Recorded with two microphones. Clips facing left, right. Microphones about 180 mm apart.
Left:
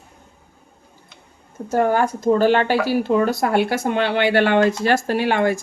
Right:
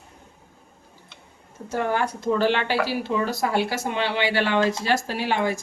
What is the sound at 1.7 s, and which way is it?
Speech, 45° left (ahead or behind).